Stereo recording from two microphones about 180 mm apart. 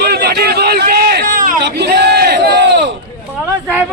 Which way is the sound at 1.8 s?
65° right (ahead or behind).